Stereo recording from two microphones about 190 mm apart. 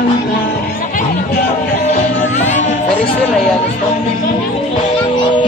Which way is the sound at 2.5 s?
40° left (ahead or behind).